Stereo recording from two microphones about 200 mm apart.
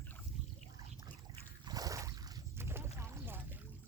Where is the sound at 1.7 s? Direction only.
20° right (ahead or behind).